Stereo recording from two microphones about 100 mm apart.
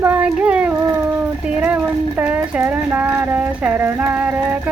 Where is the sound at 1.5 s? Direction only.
10° right (ahead or behind).